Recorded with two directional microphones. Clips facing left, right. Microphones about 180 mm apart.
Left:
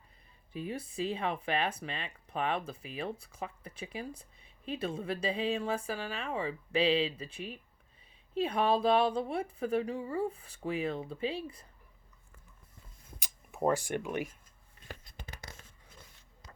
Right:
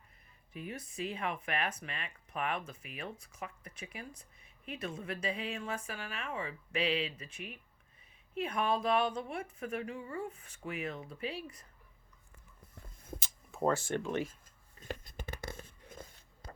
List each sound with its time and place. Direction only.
0.5 s speech: 30° left (ahead or behind)
13.1 s speech: 15° left (ahead or behind)
15.0 s a sound: 50° right (ahead or behind)